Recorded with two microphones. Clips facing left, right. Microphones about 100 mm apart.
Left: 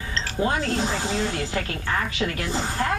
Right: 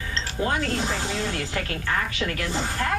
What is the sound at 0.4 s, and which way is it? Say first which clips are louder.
A woman's voice: left 2 dB; 25° left (ahead or behind).